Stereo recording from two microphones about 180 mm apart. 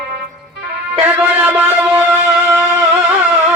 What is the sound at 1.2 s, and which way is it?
Music, 10° right (ahead or behind).